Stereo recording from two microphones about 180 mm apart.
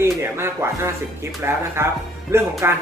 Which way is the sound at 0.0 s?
15° right (ahead or behind).